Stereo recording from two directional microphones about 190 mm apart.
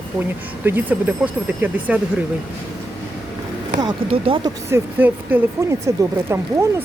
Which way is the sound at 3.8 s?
25° right (ahead or behind).